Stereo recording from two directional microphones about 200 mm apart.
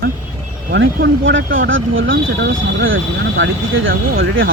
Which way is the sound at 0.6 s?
55° right (ahead or behind).